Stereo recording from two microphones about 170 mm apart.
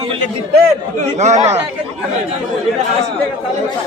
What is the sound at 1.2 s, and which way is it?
Speech, 45° right (ahead or behind).